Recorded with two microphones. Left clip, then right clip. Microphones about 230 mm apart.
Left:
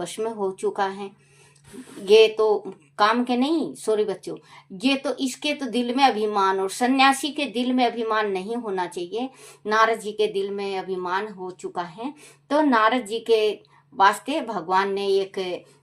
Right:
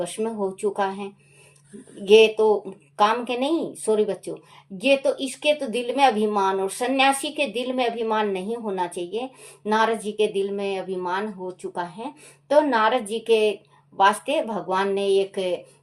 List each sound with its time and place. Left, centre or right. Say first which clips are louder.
0.0 s a woman's voice: even; left
2.3 s a woman's voice: right 1 dB; left